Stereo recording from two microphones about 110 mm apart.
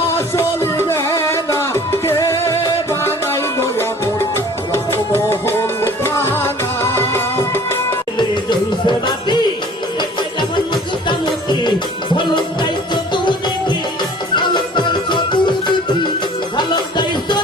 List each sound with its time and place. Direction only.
0.1 s music: 25° left (ahead or behind)
8.4 s music: 45° left (ahead or behind)
14.3 s music: 45° left (ahead or behind)